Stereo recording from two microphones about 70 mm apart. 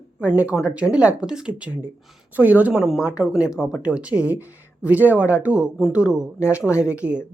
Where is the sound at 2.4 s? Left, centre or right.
Right.